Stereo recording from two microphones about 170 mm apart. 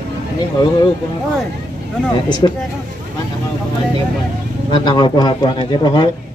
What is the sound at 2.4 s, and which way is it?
Speech, 25° left (ahead or behind).